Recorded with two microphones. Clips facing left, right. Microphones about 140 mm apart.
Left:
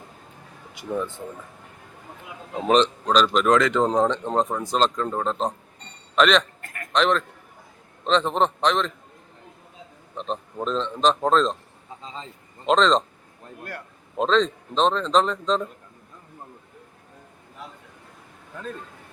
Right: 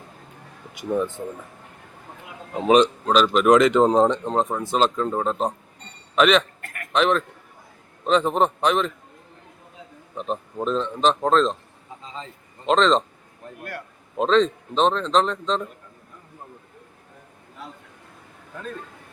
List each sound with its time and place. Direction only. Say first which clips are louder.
0.7 s a man's voice: right 4 dB; 15° right (ahead or behind)
2.6 s a man's voice: right 3 dB; 5° right (ahead or behind)
3.5 s speech: right 6 dB; 20° right (ahead or behind)
4.4 s a man's voice: even; 5° right (ahead or behind)
10.2 s a man's voice: right 2 dB; 5° right (ahead or behind)
12.6 s a man's voice: right 1 dB; centre (ahead or behind)
14.2 s a man's voice: right 2 dB; centre (ahead or behind)